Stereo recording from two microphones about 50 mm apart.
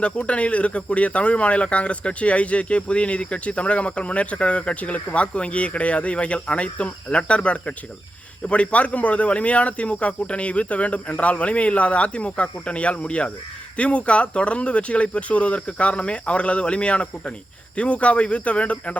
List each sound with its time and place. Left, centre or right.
0.0 s speech: left